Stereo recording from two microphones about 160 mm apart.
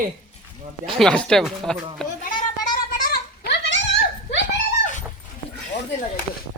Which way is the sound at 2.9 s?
65° left (ahead or behind).